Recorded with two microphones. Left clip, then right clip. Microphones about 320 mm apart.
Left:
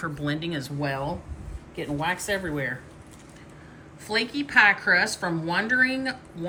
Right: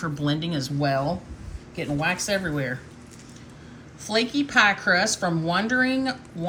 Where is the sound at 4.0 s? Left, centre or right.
Centre.